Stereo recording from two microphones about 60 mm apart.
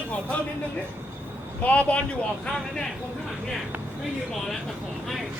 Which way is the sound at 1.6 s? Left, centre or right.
Left.